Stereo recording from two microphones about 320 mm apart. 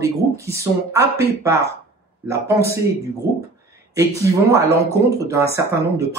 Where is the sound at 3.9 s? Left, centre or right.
Centre.